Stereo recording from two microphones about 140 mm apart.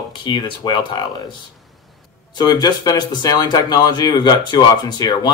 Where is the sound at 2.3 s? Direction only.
30° left (ahead or behind).